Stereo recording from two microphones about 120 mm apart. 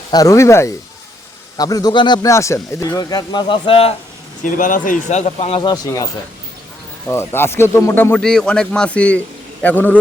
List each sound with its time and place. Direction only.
0.1 s a man's voice: 30° left (ahead or behind)
2.3 s a man's voice: 25° left (ahead or behind); by 3.9 s 50° left (ahead or behind)
4.4 s speech: 90° left; by 5.6 s 55° left (ahead or behind)
5.6 s a man's voice: 30° left (ahead or behind)
7.1 s speech: 20° left (ahead or behind)
8.2 s a man's voice: 5° left (ahead or behind)